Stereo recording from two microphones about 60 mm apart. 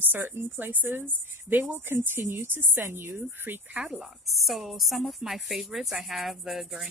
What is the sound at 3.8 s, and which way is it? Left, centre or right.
A woman's voice, centre.